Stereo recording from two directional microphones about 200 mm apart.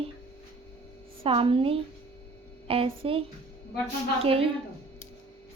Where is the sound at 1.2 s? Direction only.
25° right (ahead or behind).